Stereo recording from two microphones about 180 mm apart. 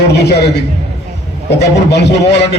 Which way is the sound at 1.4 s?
70° left (ahead or behind).